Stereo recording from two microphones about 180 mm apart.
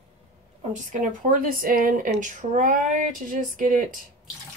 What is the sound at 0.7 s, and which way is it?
Speech, 45° right (ahead or behind).